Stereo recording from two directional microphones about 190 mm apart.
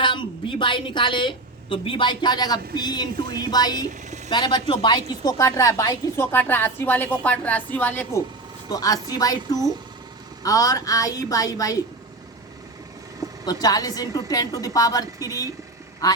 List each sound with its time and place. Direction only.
0.0 s a woman's voice: 25° left (ahead or behind)
13.4 s a woman's voice: 20° left (ahead or behind)